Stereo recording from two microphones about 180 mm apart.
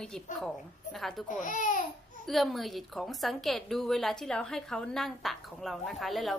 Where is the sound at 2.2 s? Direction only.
Centre (ahead or behind).